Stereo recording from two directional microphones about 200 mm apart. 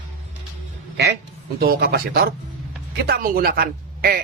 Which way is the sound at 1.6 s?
50° right (ahead or behind).